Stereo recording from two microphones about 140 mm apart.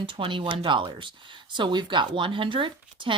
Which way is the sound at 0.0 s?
35° right (ahead or behind).